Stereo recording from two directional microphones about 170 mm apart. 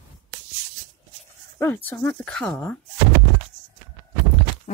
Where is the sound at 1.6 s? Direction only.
10° left (ahead or behind).